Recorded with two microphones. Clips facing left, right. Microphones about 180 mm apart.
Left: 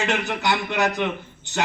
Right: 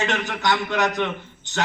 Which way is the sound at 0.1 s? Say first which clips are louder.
Even; 10° left (ahead or behind).